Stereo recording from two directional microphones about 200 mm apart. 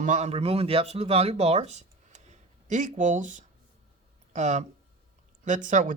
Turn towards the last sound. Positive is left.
turn(degrees=-40)  # may be behind; listen again after turning